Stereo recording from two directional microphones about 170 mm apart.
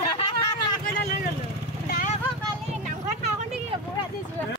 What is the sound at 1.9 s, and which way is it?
Vehicle, 55° left (ahead or behind).